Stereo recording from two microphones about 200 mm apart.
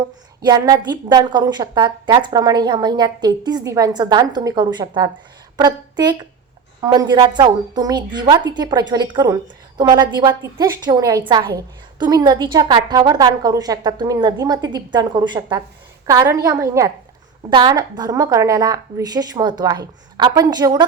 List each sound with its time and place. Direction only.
0.4 s a woman's voice: 20° right (ahead or behind)